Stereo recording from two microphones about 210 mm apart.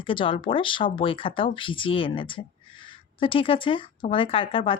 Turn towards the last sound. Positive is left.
turn(degrees=25)  # may be behind; listen again after turning